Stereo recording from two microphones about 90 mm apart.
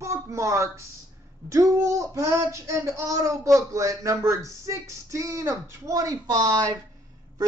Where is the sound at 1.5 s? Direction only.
35° right (ahead or behind).